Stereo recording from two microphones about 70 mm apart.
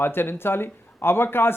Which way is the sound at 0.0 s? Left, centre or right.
Left.